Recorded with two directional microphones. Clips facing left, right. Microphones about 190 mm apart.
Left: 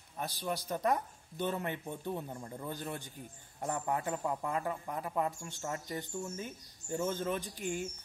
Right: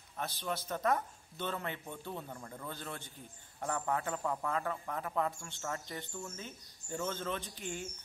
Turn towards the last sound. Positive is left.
turn(degrees=10)  # may be behind; listen again after turning